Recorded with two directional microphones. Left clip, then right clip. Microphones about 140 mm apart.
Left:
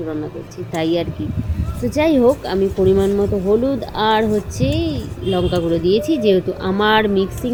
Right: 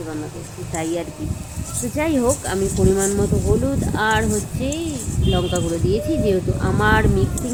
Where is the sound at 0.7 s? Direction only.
40° left (ahead or behind).